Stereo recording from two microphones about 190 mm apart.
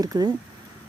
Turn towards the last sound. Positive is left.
turn(degrees=-20)  # may be behind; listen again after turning